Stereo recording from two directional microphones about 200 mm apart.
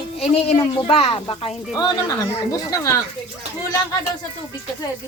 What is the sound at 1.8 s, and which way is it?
A woman's voice, 15° left (ahead or behind).